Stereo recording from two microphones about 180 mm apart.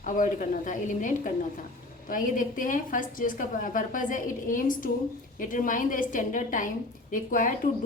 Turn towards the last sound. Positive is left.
turn(degrees=45)  # may be behind; listen again after turning